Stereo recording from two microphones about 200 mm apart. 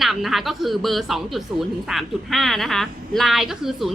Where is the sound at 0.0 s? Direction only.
Centre (ahead or behind).